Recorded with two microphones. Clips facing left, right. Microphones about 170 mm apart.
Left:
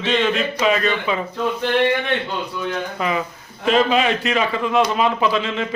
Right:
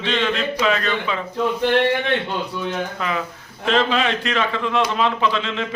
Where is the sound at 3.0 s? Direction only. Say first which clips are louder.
Left 3 dB; 5° left (ahead or behind).